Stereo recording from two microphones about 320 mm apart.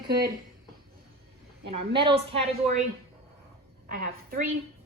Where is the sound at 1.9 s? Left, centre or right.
Centre.